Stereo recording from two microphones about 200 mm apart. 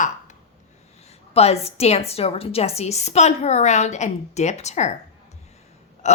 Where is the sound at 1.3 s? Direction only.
30° left (ahead or behind).